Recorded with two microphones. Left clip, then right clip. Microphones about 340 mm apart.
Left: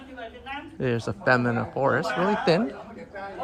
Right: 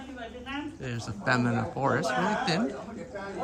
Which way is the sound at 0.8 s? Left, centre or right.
Centre.